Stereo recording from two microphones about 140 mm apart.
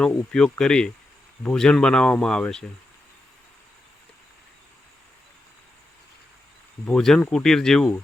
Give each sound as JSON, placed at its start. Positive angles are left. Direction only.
{"t": 0.0, "sound": "speech", "side_deg": 5}
{"t": 6.8, "sound": "speech", "side_deg": 5}